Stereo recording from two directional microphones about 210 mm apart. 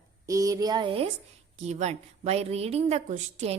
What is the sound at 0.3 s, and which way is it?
A woman's voice, 15° right (ahead or behind).